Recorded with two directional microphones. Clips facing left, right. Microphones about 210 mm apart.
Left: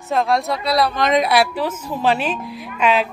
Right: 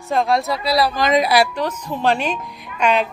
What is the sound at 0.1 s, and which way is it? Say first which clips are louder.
A woman's voice: even; centre (ahead or behind).